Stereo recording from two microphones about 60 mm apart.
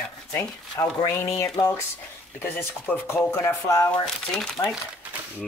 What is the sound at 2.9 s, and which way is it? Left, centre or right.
Speech, left.